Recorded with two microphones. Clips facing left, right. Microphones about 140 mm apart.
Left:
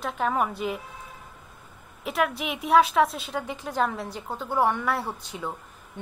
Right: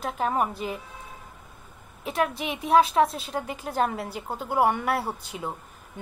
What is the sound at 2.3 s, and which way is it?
A woman's voice, centre (ahead or behind).